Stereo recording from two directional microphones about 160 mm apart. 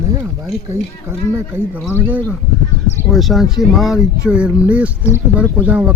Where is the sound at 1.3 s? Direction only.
15° right (ahead or behind).